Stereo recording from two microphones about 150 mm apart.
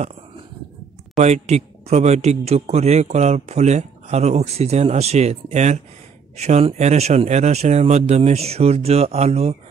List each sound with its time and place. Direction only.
1.2 s a man's voice: 45° right (ahead or behind)